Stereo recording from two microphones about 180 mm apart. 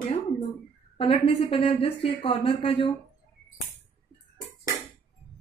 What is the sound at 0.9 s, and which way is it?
A woman's voice, 30° left (ahead or behind).